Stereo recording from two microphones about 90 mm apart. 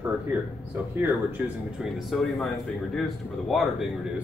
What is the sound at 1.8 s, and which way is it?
Speech, centre (ahead or behind).